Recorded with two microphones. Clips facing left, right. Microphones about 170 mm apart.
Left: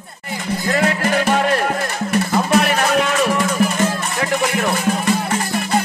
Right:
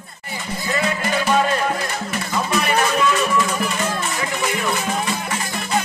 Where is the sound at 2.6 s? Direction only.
70° left (ahead or behind).